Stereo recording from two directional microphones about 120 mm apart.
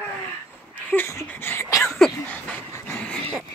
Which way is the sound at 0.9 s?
20° left (ahead or behind).